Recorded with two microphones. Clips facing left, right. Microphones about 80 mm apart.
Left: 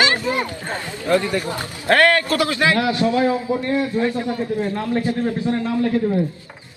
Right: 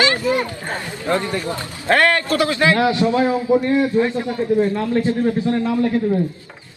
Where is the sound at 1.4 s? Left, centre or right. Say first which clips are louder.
Right 1 dB; left.